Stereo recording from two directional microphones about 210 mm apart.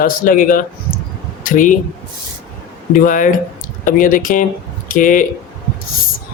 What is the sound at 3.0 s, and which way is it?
Speech, 40° left (ahead or behind).